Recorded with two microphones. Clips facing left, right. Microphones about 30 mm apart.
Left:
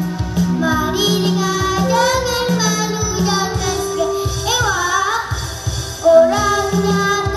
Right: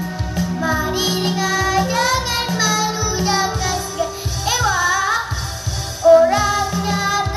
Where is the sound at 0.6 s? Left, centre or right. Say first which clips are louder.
Left 1 dB; centre.